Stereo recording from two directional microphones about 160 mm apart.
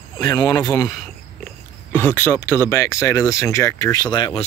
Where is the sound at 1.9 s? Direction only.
15° left (ahead or behind); by 4.4 s 30° left (ahead or behind).